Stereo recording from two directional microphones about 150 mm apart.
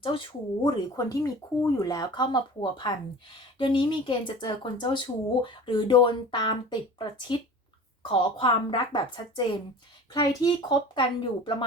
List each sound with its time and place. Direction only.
0.1 s speech: 35° left (ahead or behind)